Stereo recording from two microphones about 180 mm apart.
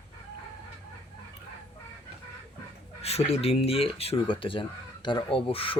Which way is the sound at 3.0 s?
35° left (ahead or behind).